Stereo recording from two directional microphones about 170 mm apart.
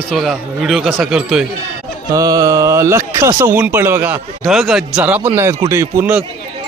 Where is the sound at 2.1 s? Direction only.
20° right (ahead or behind).